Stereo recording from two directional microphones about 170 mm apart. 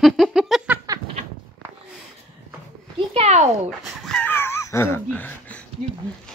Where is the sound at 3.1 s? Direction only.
40° right (ahead or behind).